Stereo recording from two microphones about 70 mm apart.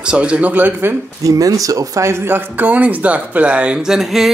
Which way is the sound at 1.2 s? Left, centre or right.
Right.